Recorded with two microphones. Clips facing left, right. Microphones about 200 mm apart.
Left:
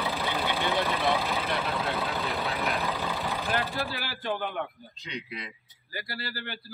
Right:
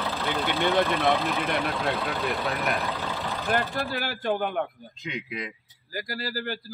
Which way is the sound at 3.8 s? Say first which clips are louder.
Right 5 dB; 50° right (ahead or behind).